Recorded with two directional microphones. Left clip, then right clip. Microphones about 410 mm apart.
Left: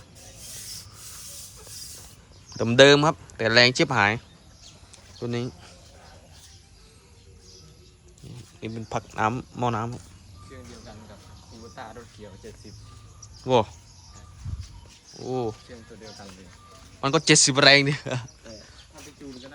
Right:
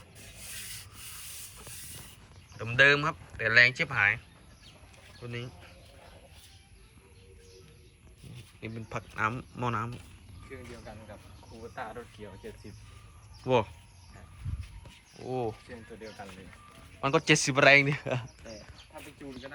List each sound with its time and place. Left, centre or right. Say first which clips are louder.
2.6 s speech: left 7 dB; centre
5.2 s speech: left 10 dB; centre
8.6 s speech: left 8 dB; centre
11.7 s snake: right 1 dB; centre
13.4 s speech: left 5 dB; centre
15.1 s speech: left 5 dB; centre
17.0 s speech: left 6 dB; centre